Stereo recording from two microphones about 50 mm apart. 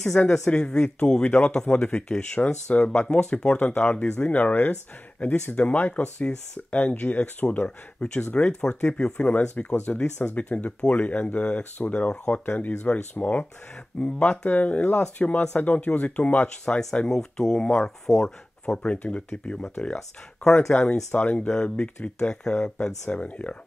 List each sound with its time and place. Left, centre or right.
0.2 s speech: left
1.2 s speech: left
1.7 s speech: left
4.2 s speech: left
10.2 s speech: left
16.6 s speech: left
17.1 s speech: centre
18.8 s speech: left
21.1 s speech: left
22.3 s speech: centre
23.0 s speech: left